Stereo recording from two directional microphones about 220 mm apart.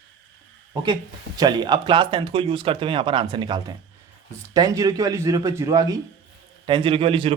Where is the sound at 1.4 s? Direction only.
20° right (ahead or behind).